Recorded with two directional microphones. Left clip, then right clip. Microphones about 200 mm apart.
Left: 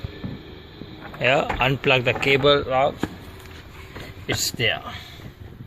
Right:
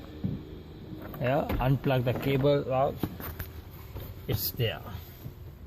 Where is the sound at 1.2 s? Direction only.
15° left (ahead or behind).